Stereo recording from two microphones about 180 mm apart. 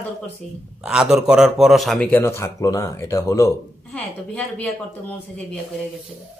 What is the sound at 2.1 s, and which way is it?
Speech, 15° left (ahead or behind).